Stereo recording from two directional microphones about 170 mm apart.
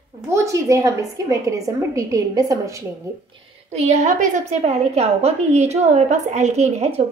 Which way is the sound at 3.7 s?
40° right (ahead or behind).